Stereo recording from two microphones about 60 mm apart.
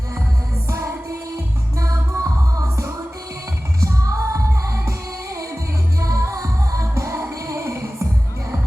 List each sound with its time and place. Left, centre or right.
1.8 s music: right